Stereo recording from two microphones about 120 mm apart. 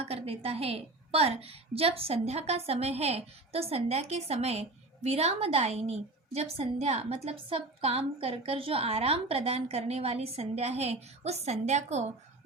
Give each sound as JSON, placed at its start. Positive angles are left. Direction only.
{"t": 0.0, "sound": "a woman's voice", "side_deg": -60}